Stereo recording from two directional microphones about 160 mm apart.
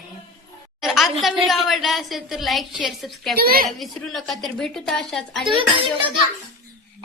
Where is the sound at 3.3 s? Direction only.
70° right (ahead or behind).